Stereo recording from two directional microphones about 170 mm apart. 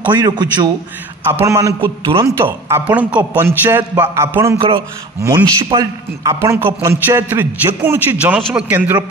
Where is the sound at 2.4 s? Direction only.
10° right (ahead or behind).